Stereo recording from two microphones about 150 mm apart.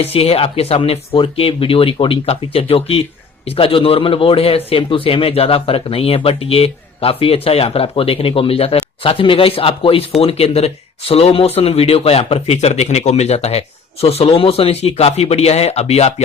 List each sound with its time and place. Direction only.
0.0 s a man's voice: 40° left (ahead or behind)